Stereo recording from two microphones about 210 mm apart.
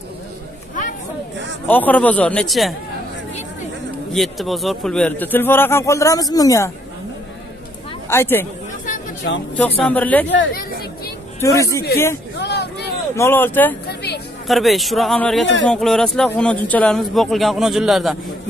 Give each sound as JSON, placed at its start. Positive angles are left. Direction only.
{"t": 1.7, "sound": "a man's voice", "side_deg": 10}
{"t": 4.1, "sound": "a man's voice", "side_deg": 0}
{"t": 8.1, "sound": "a man's voice", "side_deg": 10}
{"t": 9.3, "sound": "speech", "side_deg": 60}
{"t": 9.6, "sound": "a man's voice", "side_deg": 5}
{"t": 11.4, "sound": "a man's voice", "side_deg": 15}
{"t": 12.4, "sound": "hubbub", "side_deg": 55}
{"t": 13.1, "sound": "a man's voice", "side_deg": 10}
{"t": 13.8, "sound": "a sound", "side_deg": 50}
{"t": 14.5, "sound": "a man's voice", "side_deg": 0}